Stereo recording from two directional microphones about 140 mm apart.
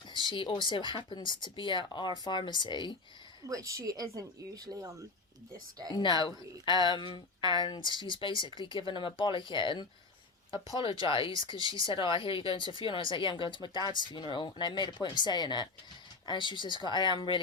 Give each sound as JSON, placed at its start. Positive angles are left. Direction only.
{"t": 0.1, "sound": "speech", "side_deg": 35}
{"t": 3.4, "sound": "speech", "side_deg": -25}
{"t": 5.9, "sound": "speech", "side_deg": 30}